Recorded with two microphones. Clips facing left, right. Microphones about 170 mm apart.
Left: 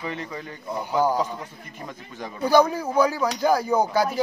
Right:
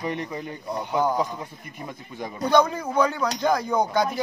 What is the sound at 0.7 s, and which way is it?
Speech, 10° left (ahead or behind).